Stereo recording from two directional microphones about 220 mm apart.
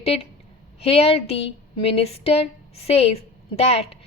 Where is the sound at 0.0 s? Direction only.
25° left (ahead or behind).